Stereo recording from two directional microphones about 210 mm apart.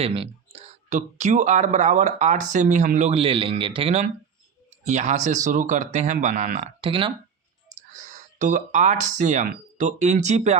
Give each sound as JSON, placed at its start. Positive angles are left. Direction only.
{"t": 0.0, "sound": "speech", "side_deg": -30}
{"t": 7.8, "sound": "speech", "side_deg": -35}